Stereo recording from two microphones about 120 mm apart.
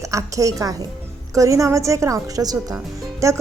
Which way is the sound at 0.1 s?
25° right (ahead or behind).